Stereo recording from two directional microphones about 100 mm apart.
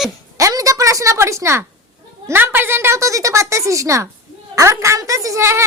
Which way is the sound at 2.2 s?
20° right (ahead or behind).